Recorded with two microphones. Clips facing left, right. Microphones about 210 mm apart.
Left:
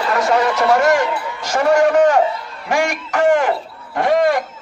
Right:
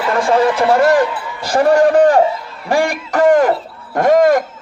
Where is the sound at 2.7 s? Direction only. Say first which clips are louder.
Right 3 dB; 35° right (ahead or behind).